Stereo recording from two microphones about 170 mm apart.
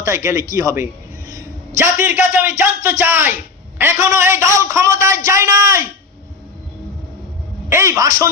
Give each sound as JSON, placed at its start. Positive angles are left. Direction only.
{"t": 0.0, "sound": "a man's voice", "side_deg": -15}
{"t": 1.3, "sound": "a sound", "side_deg": -20}
{"t": 2.4, "sound": "a man's voice", "side_deg": -15}
{"t": 7.7, "sound": "a man's voice", "side_deg": -15}